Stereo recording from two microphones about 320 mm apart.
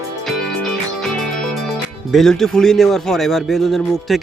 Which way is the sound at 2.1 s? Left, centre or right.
Centre.